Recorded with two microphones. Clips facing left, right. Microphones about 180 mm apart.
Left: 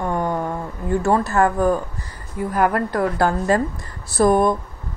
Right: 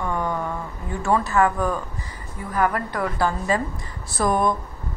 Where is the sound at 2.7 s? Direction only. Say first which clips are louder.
Left 5 dB; 50° left (ahead or behind).